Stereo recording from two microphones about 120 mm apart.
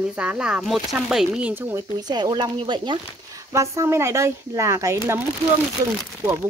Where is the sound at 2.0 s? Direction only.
35° right (ahead or behind).